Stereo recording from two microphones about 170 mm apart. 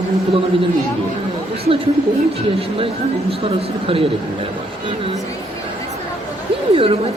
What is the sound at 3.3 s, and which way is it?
Speech, 35° right (ahead or behind).